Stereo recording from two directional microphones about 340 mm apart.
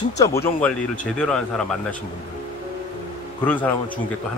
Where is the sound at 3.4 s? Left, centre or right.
Centre.